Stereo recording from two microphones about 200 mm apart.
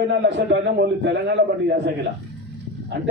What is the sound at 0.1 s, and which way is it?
A man's voice, 60° right (ahead or behind).